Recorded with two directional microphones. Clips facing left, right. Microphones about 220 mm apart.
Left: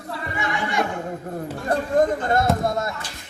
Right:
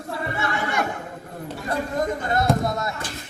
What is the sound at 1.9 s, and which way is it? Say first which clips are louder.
Speech: left 6 dB; 50° left (ahead or behind).